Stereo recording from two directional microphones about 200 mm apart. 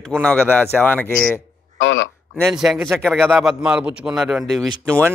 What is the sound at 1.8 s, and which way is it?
Speech, 70° left (ahead or behind).